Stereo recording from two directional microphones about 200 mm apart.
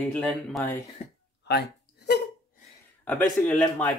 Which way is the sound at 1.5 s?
55° left (ahead or behind).